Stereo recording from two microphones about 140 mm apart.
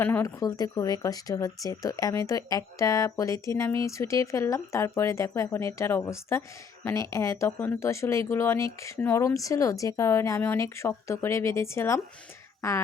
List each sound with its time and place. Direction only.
0.0 s speech: 15° left (ahead or behind)